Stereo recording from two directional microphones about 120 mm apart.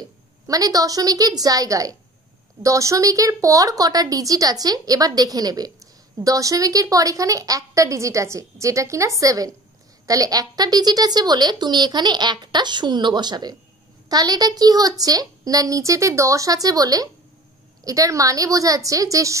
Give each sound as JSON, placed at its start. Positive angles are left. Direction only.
{"t": 0.5, "sound": "a woman's voice", "side_deg": -30}